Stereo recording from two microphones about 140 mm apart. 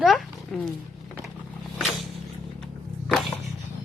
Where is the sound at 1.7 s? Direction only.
Centre (ahead or behind).